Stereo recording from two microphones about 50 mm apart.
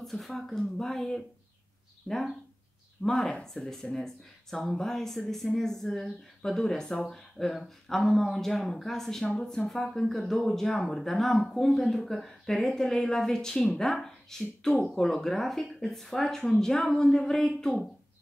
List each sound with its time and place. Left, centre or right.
0.0 s speech: centre
9.6 s speech: centre